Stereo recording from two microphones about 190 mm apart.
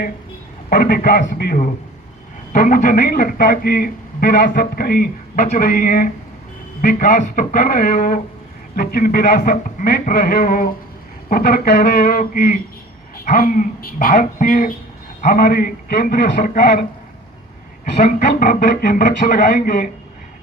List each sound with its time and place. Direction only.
0.7 s speech: 50° left (ahead or behind)
18.3 s speech: 50° left (ahead or behind)